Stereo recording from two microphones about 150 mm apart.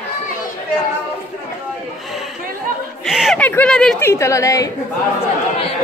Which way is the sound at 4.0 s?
20° left (ahead or behind).